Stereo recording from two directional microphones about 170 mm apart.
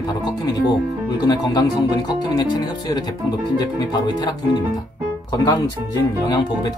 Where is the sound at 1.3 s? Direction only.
25° left (ahead or behind).